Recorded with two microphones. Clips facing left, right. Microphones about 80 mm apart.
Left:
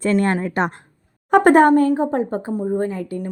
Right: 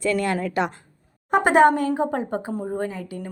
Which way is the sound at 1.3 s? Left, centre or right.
Left.